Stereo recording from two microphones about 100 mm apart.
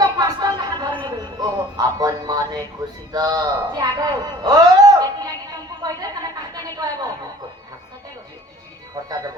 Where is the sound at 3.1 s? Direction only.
40° right (ahead or behind).